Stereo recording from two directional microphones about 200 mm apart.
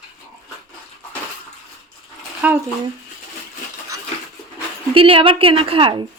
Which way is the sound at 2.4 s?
5° right (ahead or behind).